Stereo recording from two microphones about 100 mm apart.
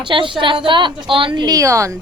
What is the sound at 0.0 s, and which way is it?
A woman's voice, 55° right (ahead or behind).